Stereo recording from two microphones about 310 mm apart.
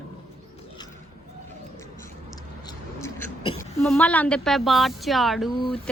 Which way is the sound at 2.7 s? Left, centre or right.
Centre.